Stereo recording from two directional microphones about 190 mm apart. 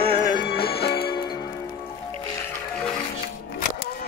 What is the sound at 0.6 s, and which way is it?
Music, 55° left (ahead or behind).